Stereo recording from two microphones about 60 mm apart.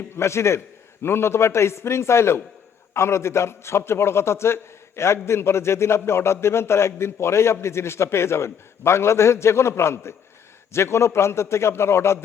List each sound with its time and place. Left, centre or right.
0.2 s a man's voice: left